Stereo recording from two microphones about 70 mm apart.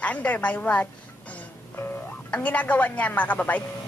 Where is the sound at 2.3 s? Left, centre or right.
Left.